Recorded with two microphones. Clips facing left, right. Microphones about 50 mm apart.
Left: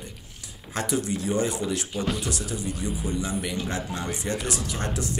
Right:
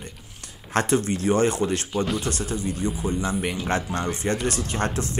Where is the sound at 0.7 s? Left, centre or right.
Right.